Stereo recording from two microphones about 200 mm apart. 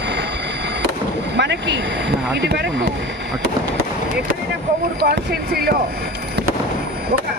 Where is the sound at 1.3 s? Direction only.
60° right (ahead or behind).